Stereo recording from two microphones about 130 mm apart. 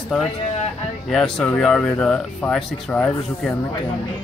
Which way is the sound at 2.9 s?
15° left (ahead or behind).